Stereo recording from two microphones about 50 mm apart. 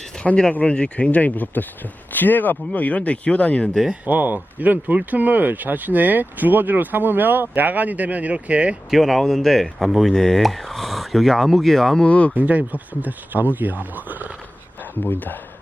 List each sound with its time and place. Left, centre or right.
0.2 s speech: centre
0.6 s speech: left
4.0 s speech: right
8.9 s speech: centre
12.0 s speech: left
12.3 s speech: right
14.8 s speech: left